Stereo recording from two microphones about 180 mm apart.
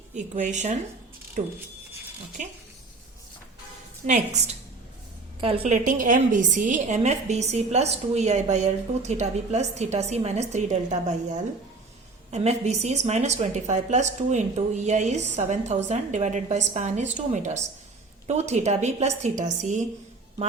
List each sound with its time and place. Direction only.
0.1 s a woman's voice: 40° right (ahead or behind)
2.4 s speech: 45° right (ahead or behind)
4.0 s a woman's voice: 40° right (ahead or behind)
5.7 s a woman's voice: 45° right (ahead or behind)